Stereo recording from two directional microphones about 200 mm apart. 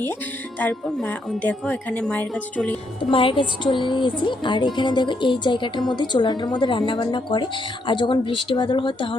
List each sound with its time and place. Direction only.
0.6 s speech: 10° left (ahead or behind)
3.0 s speech: 25° left (ahead or behind)